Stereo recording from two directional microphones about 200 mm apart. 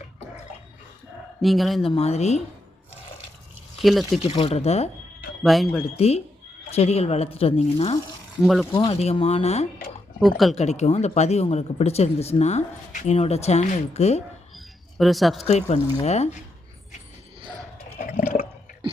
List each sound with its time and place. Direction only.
1.4 s speech: centre (ahead or behind)
1.8 s speech: 30° left (ahead or behind)
3.8 s speech: centre (ahead or behind)
4.2 s speech: 30° left (ahead or behind)
5.4 s speech: centre (ahead or behind)
6.0 s speech: 30° left (ahead or behind)
8.4 s speech: centre (ahead or behind)
8.7 s speech: 30° left (ahead or behind)
10.2 s speech: centre (ahead or behind)
10.5 s speech: 35° left (ahead or behind)
14.5 s a sound: centre (ahead or behind)
15.4 s speech: 35° left (ahead or behind)
17.9 s water: 45° left (ahead or behind)